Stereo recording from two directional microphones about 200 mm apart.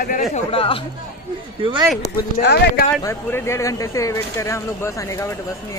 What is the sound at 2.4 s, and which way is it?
Speech, 55° left (ahead or behind).